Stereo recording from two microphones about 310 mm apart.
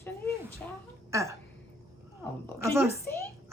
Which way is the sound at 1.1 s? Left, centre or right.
Centre.